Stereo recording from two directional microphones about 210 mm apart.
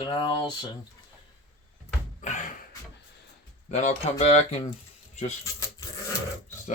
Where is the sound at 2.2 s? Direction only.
35° left (ahead or behind).